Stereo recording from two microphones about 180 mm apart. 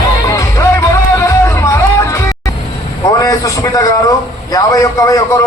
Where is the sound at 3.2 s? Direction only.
20° left (ahead or behind).